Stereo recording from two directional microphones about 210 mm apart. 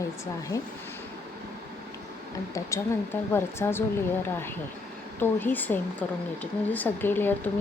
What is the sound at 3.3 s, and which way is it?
Speech, 10° left (ahead or behind).